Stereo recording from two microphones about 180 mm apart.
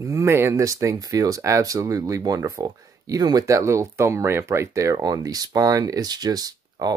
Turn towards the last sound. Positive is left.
turn(degrees=-20)  # may be behind; listen again after turning